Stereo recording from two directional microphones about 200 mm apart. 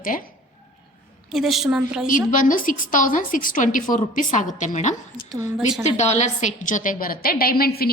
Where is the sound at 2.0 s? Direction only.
40° left (ahead or behind).